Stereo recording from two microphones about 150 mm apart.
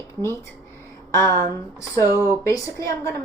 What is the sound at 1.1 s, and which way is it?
Speech, 20° left (ahead or behind).